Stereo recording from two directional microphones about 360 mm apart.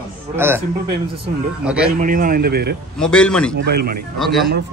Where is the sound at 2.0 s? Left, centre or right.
Right.